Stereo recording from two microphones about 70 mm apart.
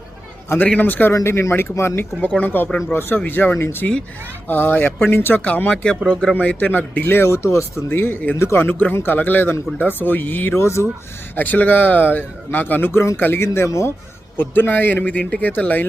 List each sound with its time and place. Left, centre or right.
0.8 s speech: left
1.1 s speech: left
8.6 s speech: left
10.6 s speech: left
11.3 s speech: left
14.3 s speech: left